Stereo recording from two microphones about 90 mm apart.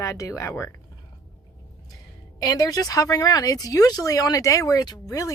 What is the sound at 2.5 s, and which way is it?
Speech, 45° left (ahead or behind).